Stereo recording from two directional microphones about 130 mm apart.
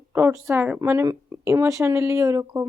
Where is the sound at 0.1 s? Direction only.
20° right (ahead or behind).